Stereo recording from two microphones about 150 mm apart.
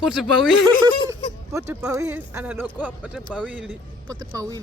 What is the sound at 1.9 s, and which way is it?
Speech, 20° right (ahead or behind).